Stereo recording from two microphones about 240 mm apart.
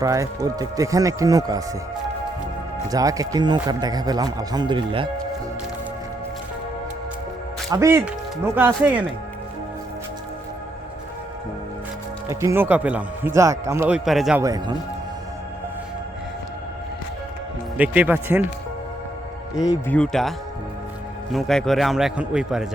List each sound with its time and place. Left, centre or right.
0.0 s a man's voice: centre
2.9 s a man's voice: centre
7.7 s a man's voice: centre
12.3 s a man's voice: centre
17.7 s a man's voice: centre
19.5 s speech: centre
20.0 s a man's voice: centre
21.3 s a man's voice: centre